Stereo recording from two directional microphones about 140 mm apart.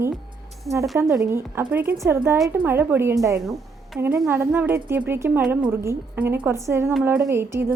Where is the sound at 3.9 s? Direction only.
Centre (ahead or behind).